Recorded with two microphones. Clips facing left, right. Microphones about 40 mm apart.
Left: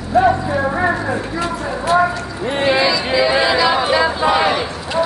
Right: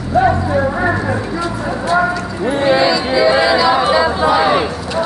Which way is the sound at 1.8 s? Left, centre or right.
Left.